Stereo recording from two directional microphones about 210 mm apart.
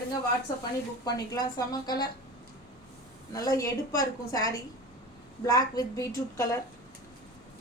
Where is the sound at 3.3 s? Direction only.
15° left (ahead or behind).